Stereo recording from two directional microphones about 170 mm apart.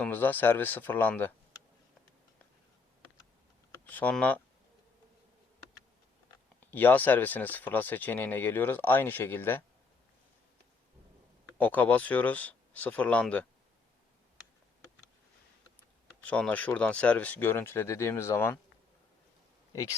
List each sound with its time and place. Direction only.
0.0 s speech: 10° left (ahead or behind)
3.7 s speech: 10° left (ahead or behind)
6.7 s speech: 10° left (ahead or behind)
11.5 s speech: 10° left (ahead or behind)
16.2 s speech: 10° left (ahead or behind)
19.7 s speech: 20° left (ahead or behind)